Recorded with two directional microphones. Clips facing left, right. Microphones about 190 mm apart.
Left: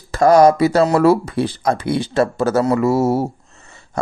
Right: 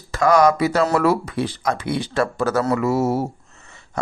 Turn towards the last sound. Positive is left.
turn(degrees=30)  # may be behind; listen again after turning